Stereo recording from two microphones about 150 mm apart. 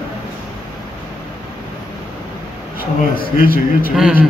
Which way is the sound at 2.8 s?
75° left (ahead or behind).